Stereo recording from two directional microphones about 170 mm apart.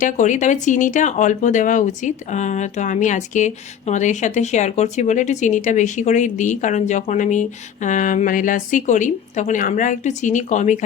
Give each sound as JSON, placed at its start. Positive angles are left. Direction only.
{"t": 0.0, "sound": "speech", "side_deg": 45}